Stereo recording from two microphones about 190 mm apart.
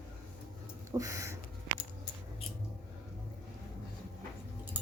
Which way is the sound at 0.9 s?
15° right (ahead or behind).